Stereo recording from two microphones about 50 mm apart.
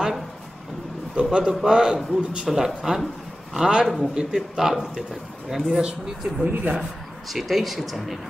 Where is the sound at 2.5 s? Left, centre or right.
Centre.